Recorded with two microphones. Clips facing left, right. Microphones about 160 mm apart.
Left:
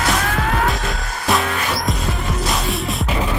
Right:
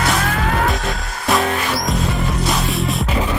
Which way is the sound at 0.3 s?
Centre (ahead or behind).